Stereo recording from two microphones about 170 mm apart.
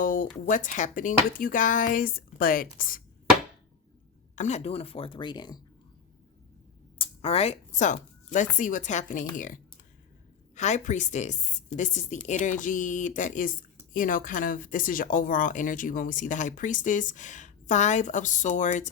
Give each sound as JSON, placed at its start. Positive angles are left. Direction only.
{"t": 0.0, "sound": "a sound", "side_deg": 50}
{"t": 0.4, "sound": "speech", "side_deg": 50}
{"t": 4.4, "sound": "speech", "side_deg": 40}
{"t": 7.0, "sound": "speech", "side_deg": 35}
{"t": 10.5, "sound": "speech", "side_deg": 45}